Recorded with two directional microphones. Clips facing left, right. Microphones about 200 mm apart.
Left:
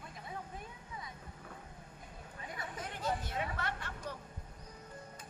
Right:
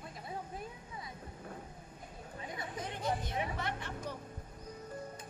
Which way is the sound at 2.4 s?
20° right (ahead or behind).